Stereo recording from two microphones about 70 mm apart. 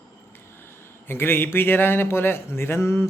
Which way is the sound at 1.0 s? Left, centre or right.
Left.